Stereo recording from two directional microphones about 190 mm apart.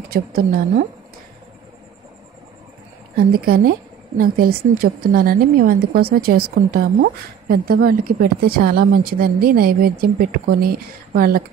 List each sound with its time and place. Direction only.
0.1 s a woman's voice: 50° right (ahead or behind)
3.2 s a woman's voice: 50° right (ahead or behind)